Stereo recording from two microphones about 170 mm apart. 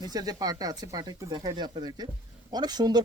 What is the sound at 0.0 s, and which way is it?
Speech, 20° right (ahead or behind).